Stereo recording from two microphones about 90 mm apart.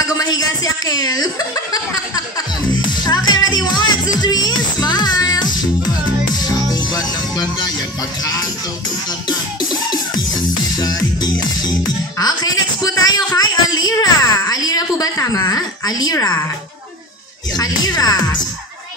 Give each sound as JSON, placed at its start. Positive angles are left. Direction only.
{"t": 0.0, "sound": "chuckle", "side_deg": 45}
{"t": 6.4, "sound": "music", "side_deg": 50}
{"t": 8.2, "sound": "speech", "side_deg": 45}
{"t": 9.3, "sound": "music", "side_deg": 50}
{"t": 17.6, "sound": "speech", "side_deg": 45}